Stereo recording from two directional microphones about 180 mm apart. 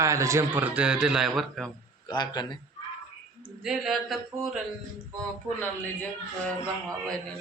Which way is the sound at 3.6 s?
Centre (ahead or behind).